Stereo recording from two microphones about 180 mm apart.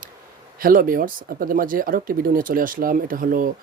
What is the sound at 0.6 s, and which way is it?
Speech, 50° right (ahead or behind).